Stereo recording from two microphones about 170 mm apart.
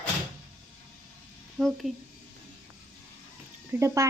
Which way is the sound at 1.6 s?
Centre (ahead or behind).